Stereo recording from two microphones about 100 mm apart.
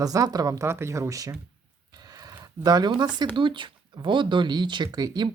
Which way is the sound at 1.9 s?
45° right (ahead or behind).